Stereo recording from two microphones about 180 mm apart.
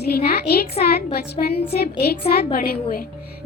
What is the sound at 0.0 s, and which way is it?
A woman's voice, 60° left (ahead or behind).